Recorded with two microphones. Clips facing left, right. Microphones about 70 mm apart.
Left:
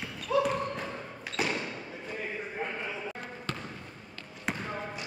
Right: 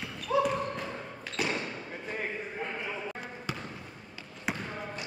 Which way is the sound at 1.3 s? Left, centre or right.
Centre.